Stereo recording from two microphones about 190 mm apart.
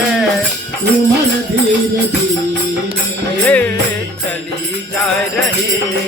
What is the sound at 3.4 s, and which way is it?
Music, 5° left (ahead or behind).